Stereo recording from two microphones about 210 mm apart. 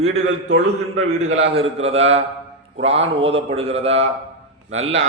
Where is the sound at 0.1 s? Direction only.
70° right (ahead or behind).